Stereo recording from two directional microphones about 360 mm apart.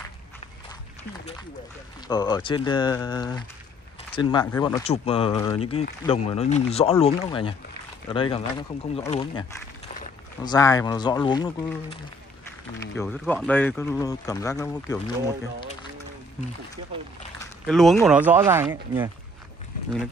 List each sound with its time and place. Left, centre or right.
2.0 s speech: centre
17.4 s speech: centre